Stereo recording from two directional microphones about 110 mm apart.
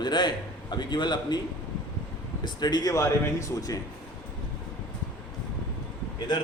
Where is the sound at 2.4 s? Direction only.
40° left (ahead or behind).